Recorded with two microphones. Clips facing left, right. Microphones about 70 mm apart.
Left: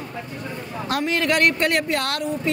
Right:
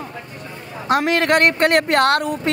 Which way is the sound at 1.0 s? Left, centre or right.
Right.